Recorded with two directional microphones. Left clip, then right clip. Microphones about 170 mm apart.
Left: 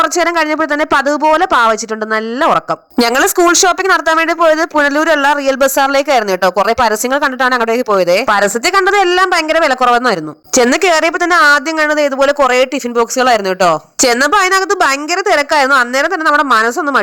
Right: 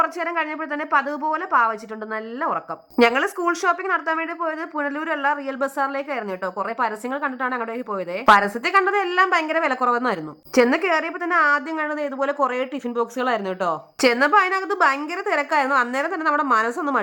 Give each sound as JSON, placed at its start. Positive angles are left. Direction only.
{"t": 0.0, "sound": "speech", "side_deg": 40}
{"t": 3.0, "sound": "speech", "side_deg": 40}